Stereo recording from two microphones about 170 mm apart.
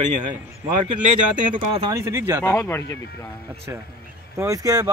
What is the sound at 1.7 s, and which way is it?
Speech, 25° right (ahead or behind).